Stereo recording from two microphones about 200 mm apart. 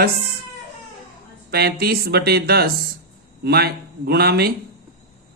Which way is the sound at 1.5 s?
50° right (ahead or behind).